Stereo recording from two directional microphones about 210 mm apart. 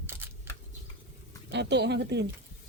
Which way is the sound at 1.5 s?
55° right (ahead or behind).